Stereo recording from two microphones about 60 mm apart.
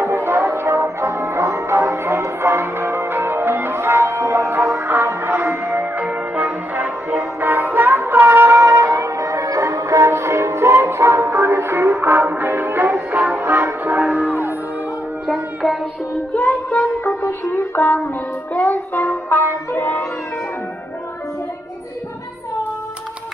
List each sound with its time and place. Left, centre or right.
0.0 s music: right
5.9 s music: right
8.5 s music: right
14.0 s music: right
16.3 s music: left
18.5 s child singing: left